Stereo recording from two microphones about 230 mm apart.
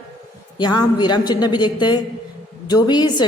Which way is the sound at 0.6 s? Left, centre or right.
Centre.